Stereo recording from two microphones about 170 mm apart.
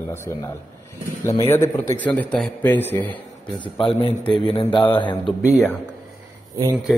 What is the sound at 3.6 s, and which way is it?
A man's voice, 30° left (ahead or behind).